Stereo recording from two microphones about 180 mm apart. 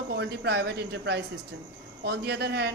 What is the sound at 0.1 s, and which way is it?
A woman's voice, 65° right (ahead or behind).